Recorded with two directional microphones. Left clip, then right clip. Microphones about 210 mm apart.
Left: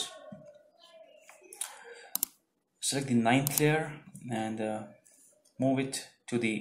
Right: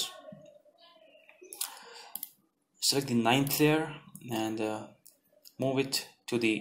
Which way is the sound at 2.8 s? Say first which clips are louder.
Right 1 dB; 35° right (ahead or behind).